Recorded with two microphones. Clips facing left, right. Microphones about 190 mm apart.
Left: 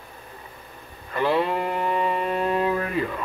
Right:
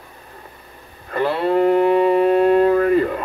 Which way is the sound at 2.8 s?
55° right (ahead or behind).